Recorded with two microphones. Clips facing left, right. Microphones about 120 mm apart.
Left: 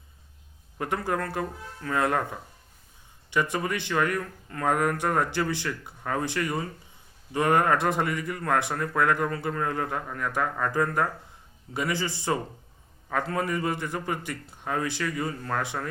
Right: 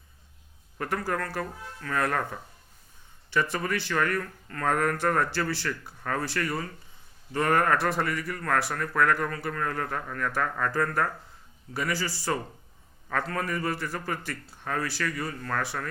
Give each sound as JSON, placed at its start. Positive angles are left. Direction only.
{"t": 0.8, "sound": "a man's voice", "side_deg": 20}